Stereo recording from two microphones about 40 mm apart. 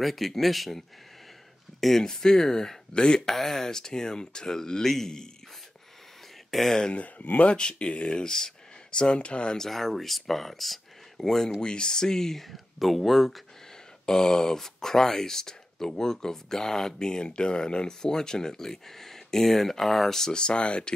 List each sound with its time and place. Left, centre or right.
0.0 s speech: centre
2.0 s speech: centre
2.9 s speech: left
3.2 s speech: centre
6.5 s speech: centre
7.0 s speech: left
7.5 s speech: left
8.2 s a sound: centre
9.0 s speech: left
9.6 s speech: centre
14.0 s speech: centre
20.3 s speech: left